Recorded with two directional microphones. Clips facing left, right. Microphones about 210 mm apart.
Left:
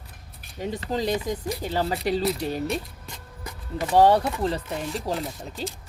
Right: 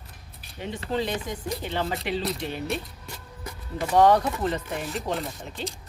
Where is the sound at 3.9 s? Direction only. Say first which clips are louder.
Left 1 dB; 30° left (ahead or behind).